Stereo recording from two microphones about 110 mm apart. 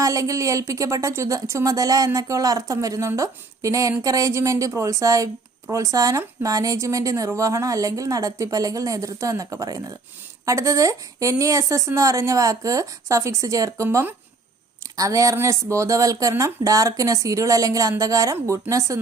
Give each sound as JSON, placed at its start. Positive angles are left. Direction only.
{"t": 0.0, "sound": "a woman's voice", "side_deg": -30}